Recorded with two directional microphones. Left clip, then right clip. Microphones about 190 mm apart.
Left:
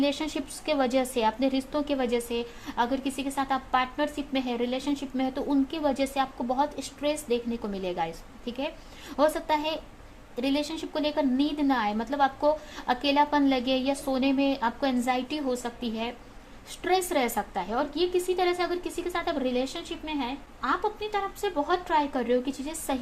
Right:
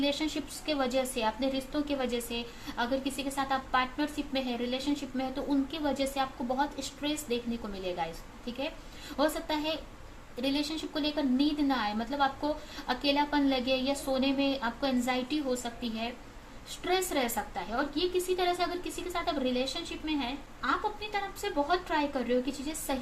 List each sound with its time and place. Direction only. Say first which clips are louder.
0.0 s a woman's voice: left 3 dB; 50° left (ahead or behind)